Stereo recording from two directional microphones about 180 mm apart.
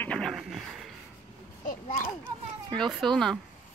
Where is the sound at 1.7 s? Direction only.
45° left (ahead or behind).